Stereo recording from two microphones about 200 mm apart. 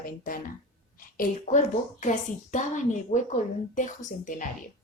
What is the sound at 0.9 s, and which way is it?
A woman's voice, 45° left (ahead or behind).